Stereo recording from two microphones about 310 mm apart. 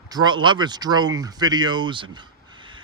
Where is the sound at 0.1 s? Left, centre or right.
Centre.